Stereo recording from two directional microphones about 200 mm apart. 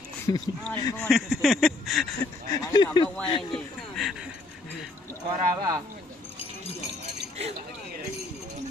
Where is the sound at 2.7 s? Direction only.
20° left (ahead or behind).